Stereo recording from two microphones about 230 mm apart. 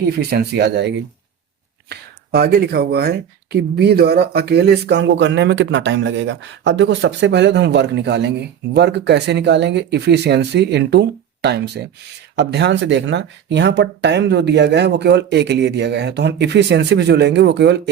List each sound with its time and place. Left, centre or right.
0.2 s speech: right